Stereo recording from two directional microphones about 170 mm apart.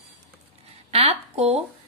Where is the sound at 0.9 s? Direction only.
40° right (ahead or behind).